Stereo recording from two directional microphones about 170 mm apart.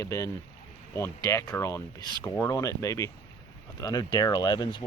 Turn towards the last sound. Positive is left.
turn(degrees=25)  # may be behind; listen again after turning